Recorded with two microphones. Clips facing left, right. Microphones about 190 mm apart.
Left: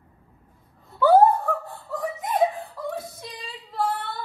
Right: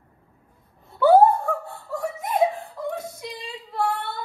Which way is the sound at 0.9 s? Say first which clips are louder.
Right 1 dB; 15° right (ahead or behind).